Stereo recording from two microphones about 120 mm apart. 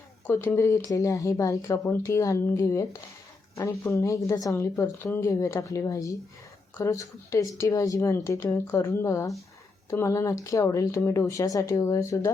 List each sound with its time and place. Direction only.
0.3 s speech: 20° left (ahead or behind)